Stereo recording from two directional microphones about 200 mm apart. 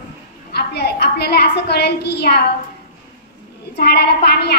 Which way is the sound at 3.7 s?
55° left (ahead or behind).